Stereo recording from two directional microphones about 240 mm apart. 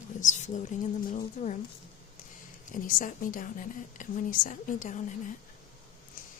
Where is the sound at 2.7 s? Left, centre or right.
Left.